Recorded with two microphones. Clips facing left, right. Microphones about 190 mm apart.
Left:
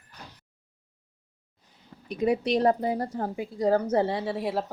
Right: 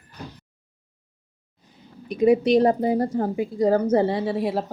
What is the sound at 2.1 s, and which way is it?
Speech, 15° right (ahead or behind).